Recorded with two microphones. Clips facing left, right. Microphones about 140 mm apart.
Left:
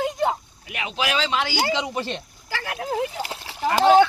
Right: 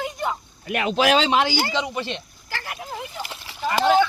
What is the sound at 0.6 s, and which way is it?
Speech, 60° right (ahead or behind).